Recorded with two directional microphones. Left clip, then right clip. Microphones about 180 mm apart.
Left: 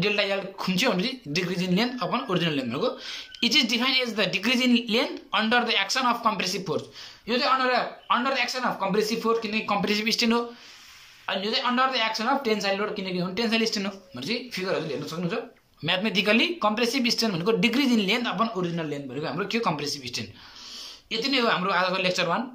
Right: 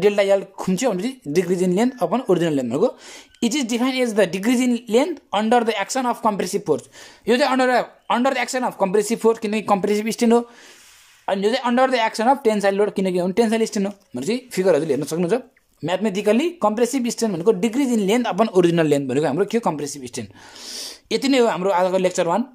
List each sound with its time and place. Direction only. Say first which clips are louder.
0.0 s speech: right 8 dB; 40° right (ahead or behind)
15.8 s speech: right 3 dB; 35° right (ahead or behind)
18.5 s speech: right 14 dB; 70° right (ahead or behind); by 22.4 s 40° right (ahead or behind)